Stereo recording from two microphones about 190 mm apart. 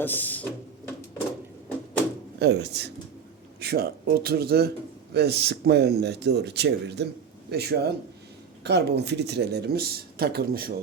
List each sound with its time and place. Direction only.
0.0 s speech: 10° left (ahead or behind)
2.4 s speech: 65° right (ahead or behind)